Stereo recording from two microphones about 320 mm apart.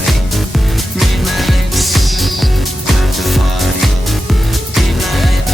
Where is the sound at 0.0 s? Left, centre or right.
Centre.